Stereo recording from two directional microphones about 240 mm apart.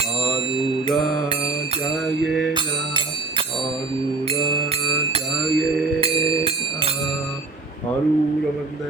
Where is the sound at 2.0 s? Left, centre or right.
Centre.